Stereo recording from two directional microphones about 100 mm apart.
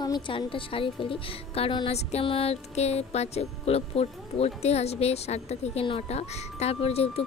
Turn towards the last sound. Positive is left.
turn(degrees=85)